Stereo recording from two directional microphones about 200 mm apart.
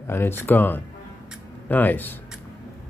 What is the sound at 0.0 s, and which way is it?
Speech, 10° left (ahead or behind).